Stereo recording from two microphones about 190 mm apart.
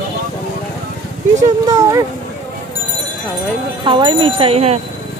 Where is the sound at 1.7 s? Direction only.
15° right (ahead or behind).